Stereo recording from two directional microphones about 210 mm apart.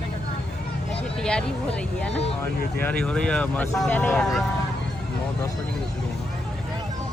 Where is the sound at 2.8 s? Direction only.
5° left (ahead or behind).